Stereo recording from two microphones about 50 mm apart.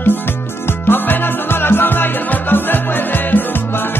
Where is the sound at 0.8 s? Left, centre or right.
Left.